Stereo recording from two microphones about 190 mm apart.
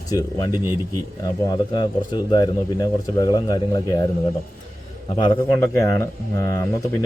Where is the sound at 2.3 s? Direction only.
20° left (ahead or behind).